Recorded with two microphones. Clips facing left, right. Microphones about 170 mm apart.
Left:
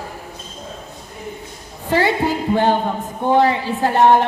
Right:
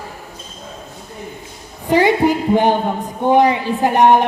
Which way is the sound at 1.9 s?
15° right (ahead or behind).